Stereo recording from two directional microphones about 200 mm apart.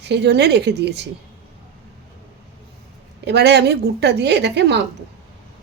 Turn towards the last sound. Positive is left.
turn(degrees=-60)  # may be behind; listen again after turning